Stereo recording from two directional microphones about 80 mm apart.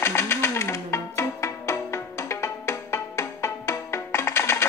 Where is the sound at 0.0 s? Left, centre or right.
Left.